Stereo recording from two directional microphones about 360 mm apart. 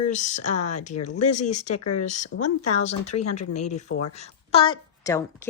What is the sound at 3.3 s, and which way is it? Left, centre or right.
A woman's voice, centre.